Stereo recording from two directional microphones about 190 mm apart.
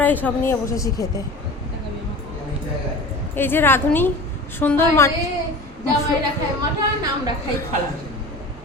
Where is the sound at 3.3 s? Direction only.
10° left (ahead or behind).